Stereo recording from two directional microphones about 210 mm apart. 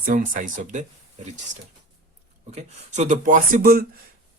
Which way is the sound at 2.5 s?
35° right (ahead or behind).